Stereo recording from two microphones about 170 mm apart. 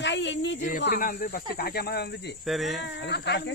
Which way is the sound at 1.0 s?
55° left (ahead or behind).